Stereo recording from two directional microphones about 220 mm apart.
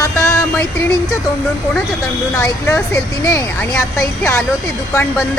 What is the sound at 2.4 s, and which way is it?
Speech, 10° left (ahead or behind).